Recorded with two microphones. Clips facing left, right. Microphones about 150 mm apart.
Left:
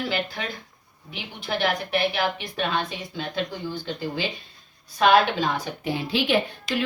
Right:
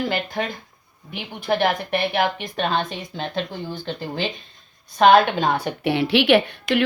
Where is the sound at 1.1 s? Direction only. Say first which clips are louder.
Right 6 dB; 50° right (ahead or behind).